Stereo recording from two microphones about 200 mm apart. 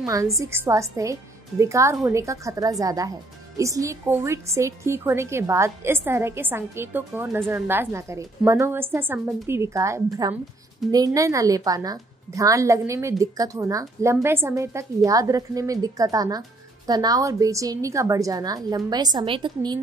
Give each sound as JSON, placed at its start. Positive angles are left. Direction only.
{"t": 0.0, "sound": "a woman's voice", "side_deg": -15}